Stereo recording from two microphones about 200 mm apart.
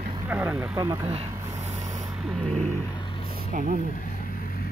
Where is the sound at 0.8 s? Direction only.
20° right (ahead or behind).